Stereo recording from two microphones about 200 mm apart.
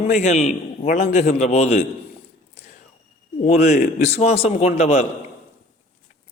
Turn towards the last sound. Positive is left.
turn(degrees=35)  # may be behind; listen again after turning